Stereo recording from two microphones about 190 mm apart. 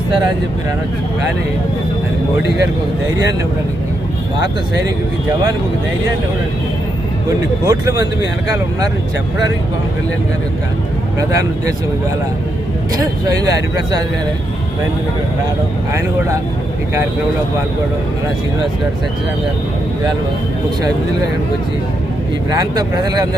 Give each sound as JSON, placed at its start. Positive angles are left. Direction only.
{"t": 7.3, "sound": "speech", "side_deg": -15}
{"t": 11.2, "sound": "speech", "side_deg": -15}
{"t": 13.0, "sound": "speech", "side_deg": -20}
{"t": 15.9, "sound": "speech", "side_deg": -15}
{"t": 22.4, "sound": "speech", "side_deg": -20}